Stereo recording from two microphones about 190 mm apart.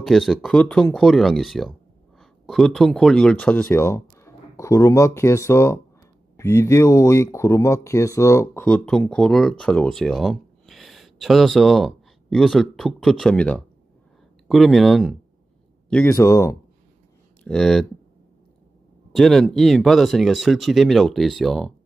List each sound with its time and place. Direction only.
0.0 s speech: centre (ahead or behind)
17.4 s speech: 5° left (ahead or behind)
19.1 s speech: centre (ahead or behind)